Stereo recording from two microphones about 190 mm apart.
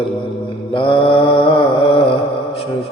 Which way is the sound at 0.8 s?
25° left (ahead or behind).